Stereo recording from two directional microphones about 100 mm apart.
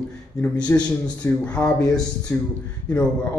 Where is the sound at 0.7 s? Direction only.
25° left (ahead or behind).